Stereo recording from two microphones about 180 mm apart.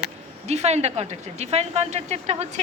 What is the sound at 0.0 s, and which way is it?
Speech, 40° right (ahead or behind).